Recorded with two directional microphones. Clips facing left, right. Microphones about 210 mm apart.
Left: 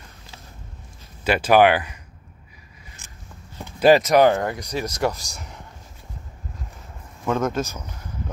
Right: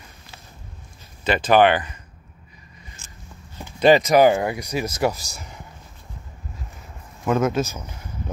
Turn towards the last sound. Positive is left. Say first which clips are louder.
# right 3 dB
turn(degrees=-5)  # may be behind; listen again after turning